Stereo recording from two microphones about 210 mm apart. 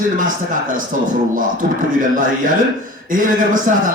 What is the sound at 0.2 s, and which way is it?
Speech, 40° right (ahead or behind).